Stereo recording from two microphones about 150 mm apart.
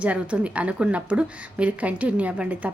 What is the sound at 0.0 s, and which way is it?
A woman's voice, 10° right (ahead or behind).